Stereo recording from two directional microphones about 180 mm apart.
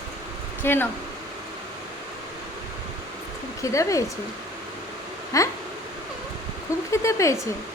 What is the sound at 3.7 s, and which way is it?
Speech, 15° left (ahead or behind).